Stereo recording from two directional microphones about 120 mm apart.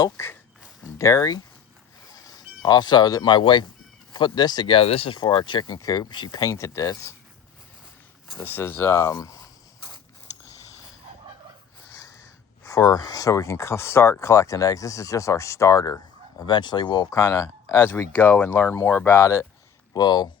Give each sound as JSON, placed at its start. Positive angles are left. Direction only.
{"t": 0.0, "sound": "speech", "side_deg": 25}
{"t": 5.2, "sound": "speech", "side_deg": 40}
{"t": 8.4, "sound": "speech", "side_deg": 15}
{"t": 11.9, "sound": "a sound", "side_deg": 30}
{"t": 12.6, "sound": "speech", "side_deg": 30}